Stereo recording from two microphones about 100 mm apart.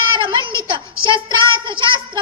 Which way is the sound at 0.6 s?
50° right (ahead or behind).